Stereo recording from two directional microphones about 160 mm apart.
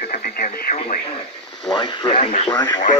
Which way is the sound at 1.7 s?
30° left (ahead or behind).